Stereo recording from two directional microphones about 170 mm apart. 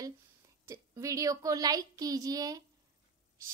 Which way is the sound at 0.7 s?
20° right (ahead or behind).